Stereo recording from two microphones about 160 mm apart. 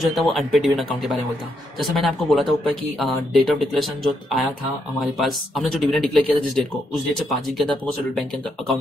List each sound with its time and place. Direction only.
0.0 s speech: centre (ahead or behind)